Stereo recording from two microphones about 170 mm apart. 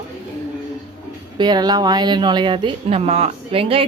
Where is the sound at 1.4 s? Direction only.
25° right (ahead or behind).